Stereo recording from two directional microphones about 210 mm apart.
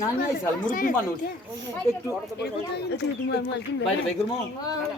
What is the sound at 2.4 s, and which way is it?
Speech, 50° left (ahead or behind).